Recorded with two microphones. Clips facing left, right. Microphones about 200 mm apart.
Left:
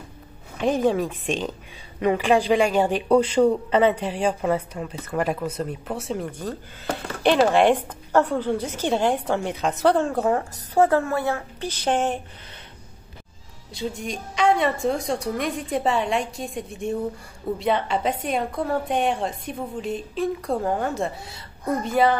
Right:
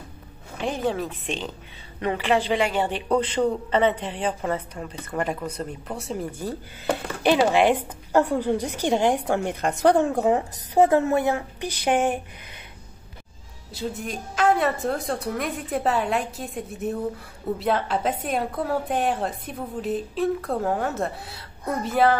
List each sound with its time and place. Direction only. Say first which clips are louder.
0.7 s a woman's voice: left 5 dB; 15° left (ahead or behind); by 12.2 s 10° right (ahead or behind)
13.7 s a woman's voice: left 1 dB; 5° right (ahead or behind)